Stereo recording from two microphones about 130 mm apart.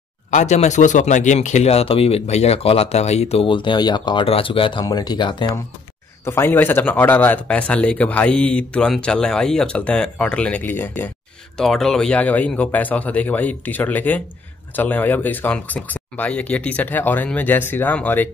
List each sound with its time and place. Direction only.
0.3 s speech: 65° left (ahead or behind); by 5.5 s 35° left (ahead or behind)
6.2 s speech: 20° left (ahead or behind)
11.5 s speech: 5° left (ahead or behind)